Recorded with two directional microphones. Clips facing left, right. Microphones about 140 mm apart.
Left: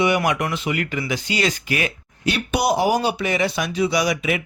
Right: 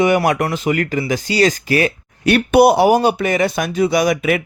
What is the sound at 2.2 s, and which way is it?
Speech, 55° right (ahead or behind).